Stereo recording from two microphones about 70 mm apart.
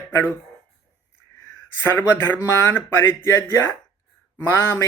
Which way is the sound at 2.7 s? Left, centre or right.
Left.